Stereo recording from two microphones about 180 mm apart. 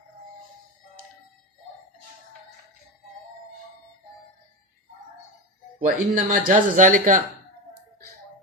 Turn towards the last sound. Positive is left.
turn(degrees=-45)  # may be behind; listen again after turning